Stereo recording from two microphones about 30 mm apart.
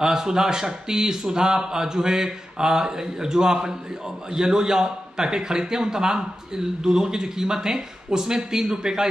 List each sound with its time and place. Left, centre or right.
0.0 s a man's voice: centre